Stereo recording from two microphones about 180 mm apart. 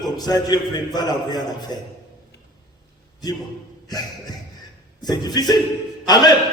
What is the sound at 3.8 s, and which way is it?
Speech, 20° left (ahead or behind).